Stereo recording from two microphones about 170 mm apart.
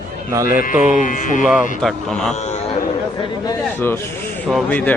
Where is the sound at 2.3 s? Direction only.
40° left (ahead or behind).